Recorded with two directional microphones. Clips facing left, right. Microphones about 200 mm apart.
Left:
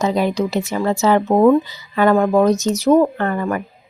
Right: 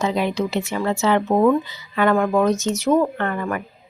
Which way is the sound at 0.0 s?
40° left (ahead or behind).